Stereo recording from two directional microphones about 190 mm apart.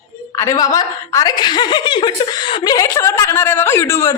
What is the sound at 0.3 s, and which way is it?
A woman's voice, 20° left (ahead or behind).